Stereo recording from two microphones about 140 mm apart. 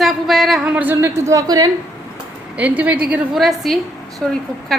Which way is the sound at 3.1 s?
Centre (ahead or behind).